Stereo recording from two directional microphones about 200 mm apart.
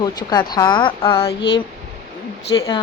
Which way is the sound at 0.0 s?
20° left (ahead or behind).